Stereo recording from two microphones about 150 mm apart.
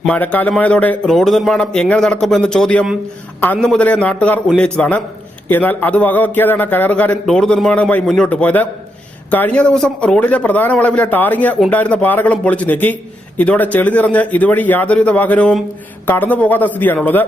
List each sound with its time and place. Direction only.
0.0 s a man's voice: 10° left (ahead or behind)